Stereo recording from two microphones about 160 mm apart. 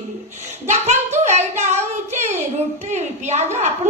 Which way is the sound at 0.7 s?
45° right (ahead or behind).